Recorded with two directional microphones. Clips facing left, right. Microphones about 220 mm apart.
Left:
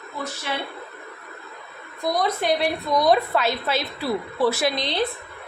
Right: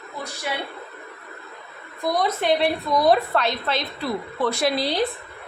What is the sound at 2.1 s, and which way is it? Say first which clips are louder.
A woman's voice: right 1 dB; centre (ahead or behind).